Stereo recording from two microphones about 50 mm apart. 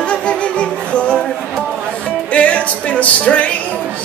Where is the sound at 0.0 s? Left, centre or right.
Left.